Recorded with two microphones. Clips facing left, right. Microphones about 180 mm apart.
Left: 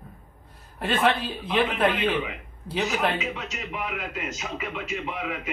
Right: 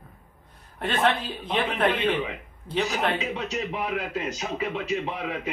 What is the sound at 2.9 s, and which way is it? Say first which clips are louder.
A man's voice: even; 35° right (ahead or behind).